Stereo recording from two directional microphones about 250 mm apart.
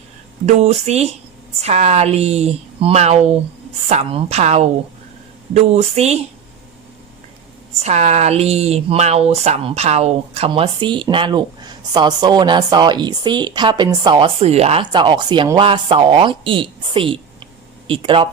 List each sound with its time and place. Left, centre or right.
0.4 s speech: right
7.8 s speech: right